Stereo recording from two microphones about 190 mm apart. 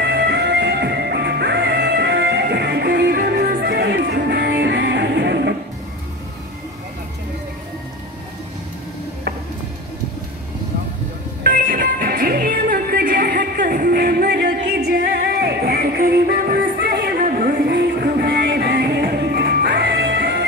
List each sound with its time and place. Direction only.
0.0 s music: 60° right (ahead or behind)
11.4 s music: 55° right (ahead or behind)